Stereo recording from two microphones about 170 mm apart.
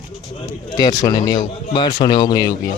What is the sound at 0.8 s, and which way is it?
Speech, 20° left (ahead or behind).